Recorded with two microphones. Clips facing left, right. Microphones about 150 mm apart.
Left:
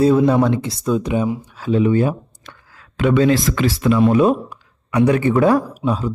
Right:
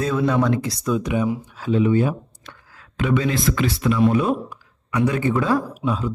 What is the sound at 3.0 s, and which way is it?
Speech, 80° left.